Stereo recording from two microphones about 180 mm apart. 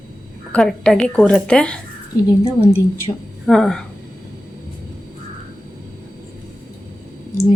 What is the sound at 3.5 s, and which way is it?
Speech, 5° left (ahead or behind).